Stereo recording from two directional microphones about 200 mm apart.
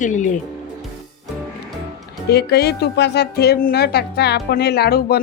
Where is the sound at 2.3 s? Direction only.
55° left (ahead or behind).